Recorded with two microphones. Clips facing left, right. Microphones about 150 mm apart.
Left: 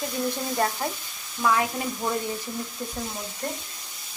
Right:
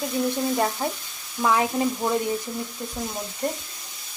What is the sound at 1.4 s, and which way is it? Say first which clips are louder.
Speech: right 2 dB; 20° right (ahead or behind).